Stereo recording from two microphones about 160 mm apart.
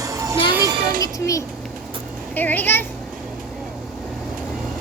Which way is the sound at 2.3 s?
10° left (ahead or behind).